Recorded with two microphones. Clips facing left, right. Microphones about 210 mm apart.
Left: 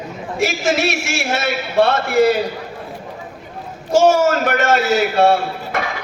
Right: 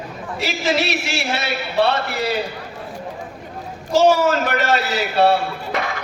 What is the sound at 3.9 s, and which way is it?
A man's voice, 45° left (ahead or behind).